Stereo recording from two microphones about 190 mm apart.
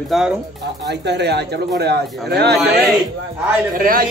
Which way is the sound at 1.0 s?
60° right (ahead or behind).